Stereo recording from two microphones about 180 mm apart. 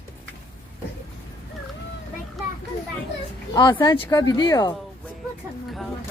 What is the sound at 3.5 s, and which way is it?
Speech, 25° left (ahead or behind).